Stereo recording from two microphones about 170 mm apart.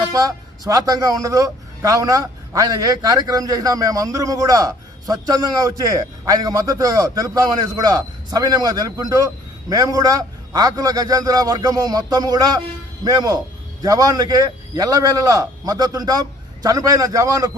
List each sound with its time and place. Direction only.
0.0 s a man's voice: 20° right (ahead or behind)